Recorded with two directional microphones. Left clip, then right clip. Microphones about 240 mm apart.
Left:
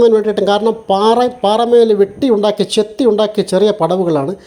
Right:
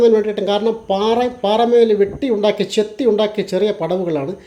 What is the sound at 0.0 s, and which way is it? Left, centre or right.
Speech, left.